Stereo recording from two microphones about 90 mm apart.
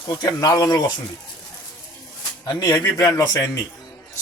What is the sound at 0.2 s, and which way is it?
Speech, 45° left (ahead or behind).